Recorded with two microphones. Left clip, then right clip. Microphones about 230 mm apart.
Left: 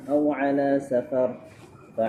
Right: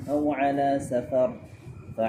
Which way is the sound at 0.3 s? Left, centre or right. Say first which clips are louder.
Left 1 dB; right.